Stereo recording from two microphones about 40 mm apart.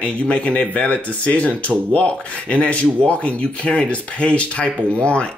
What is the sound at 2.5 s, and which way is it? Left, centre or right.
Speech, left.